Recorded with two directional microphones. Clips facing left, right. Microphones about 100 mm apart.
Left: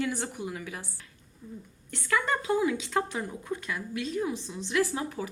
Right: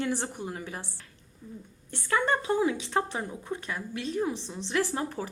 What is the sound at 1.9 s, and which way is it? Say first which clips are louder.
Speech: right 1 dB; 30° right (ahead or behind).